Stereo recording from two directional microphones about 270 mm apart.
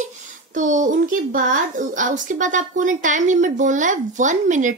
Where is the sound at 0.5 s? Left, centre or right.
Right.